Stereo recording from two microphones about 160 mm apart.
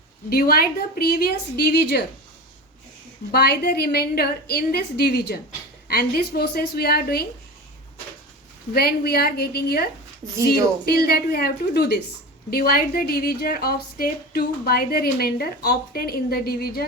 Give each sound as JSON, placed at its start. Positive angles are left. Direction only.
{"t": 0.3, "sound": "a woman's voice", "side_deg": 70}
{"t": 3.3, "sound": "a woman's voice", "side_deg": 75}
{"t": 5.9, "sound": "a woman's voice", "side_deg": 70}
{"t": 8.7, "sound": "a woman's voice", "side_deg": 75}
{"t": 10.3, "sound": "speech", "side_deg": -20}
{"t": 10.8, "sound": "a woman's voice", "side_deg": 75}
{"t": 12.5, "sound": "a woman's voice", "side_deg": 70}